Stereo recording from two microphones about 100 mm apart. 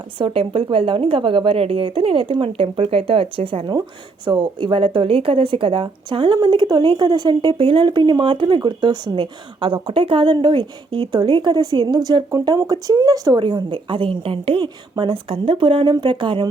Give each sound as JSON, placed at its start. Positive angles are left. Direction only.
{"t": 0.2, "sound": "a woman's voice", "side_deg": -65}
{"t": 4.3, "sound": "speech", "side_deg": -50}
{"t": 13.4, "sound": "a woman's voice", "side_deg": -55}